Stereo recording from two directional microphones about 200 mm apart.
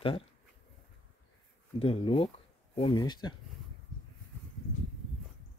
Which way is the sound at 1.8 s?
30° left (ahead or behind).